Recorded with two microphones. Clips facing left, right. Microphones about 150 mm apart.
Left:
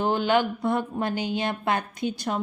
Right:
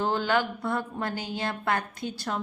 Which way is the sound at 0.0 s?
20° left (ahead or behind).